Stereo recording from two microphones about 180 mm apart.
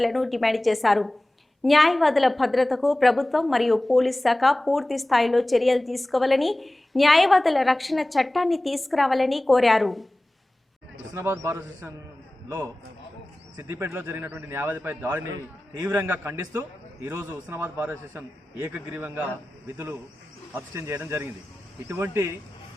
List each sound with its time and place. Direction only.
0.0 s a woman's voice: centre (ahead or behind)
11.1 s a man's voice: 15° right (ahead or behind)